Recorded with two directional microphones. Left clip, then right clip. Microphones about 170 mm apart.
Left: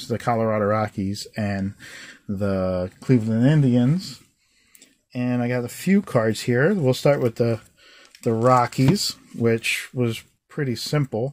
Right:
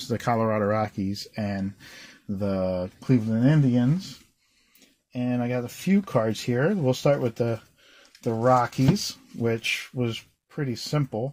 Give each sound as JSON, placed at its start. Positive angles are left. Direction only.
{"t": 0.0, "sound": "speech", "side_deg": 15}
{"t": 5.1, "sound": "speech", "side_deg": 35}